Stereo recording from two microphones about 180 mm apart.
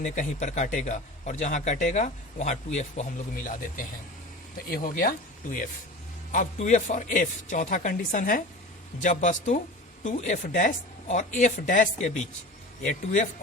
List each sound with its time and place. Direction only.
0.0 s a man's voice: 40° left (ahead or behind)
6.3 s speech: 45° left (ahead or behind)